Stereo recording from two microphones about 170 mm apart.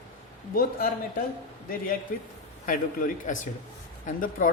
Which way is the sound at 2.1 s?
55° left (ahead or behind).